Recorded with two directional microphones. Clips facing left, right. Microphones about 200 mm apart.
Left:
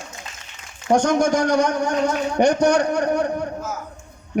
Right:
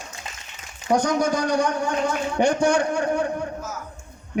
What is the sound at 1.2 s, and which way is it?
Speech, 80° left.